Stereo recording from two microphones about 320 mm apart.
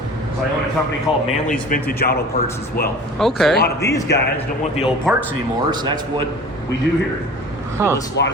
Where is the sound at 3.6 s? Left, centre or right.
Left.